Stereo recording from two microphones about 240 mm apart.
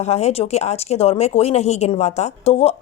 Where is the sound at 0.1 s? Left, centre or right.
Left.